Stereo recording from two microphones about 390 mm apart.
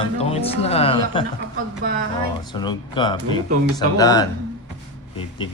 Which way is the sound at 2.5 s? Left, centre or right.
Centre.